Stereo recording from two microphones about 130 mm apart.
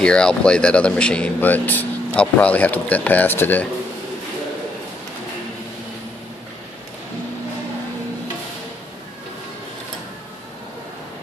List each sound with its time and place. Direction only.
0.0 s speech: 5° left (ahead or behind)